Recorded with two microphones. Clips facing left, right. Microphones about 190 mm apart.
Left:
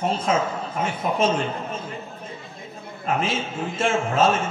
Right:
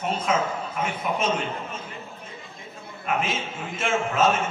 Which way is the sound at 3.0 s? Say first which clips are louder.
Left 2 dB; 30° left (ahead or behind).